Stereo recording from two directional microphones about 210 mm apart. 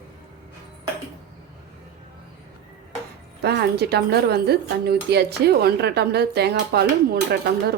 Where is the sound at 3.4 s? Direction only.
50° right (ahead or behind).